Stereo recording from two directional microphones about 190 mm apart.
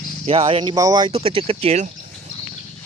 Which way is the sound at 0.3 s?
30° right (ahead or behind).